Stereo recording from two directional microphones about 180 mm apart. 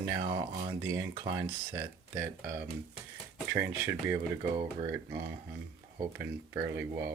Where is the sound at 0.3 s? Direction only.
15° right (ahead or behind).